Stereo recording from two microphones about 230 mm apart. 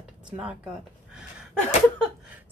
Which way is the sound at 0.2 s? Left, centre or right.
Centre.